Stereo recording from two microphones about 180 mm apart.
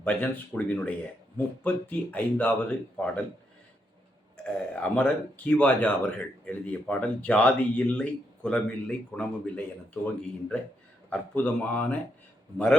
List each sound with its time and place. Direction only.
0.0 s speech: 10° left (ahead or behind)
4.4 s speech: 5° left (ahead or behind)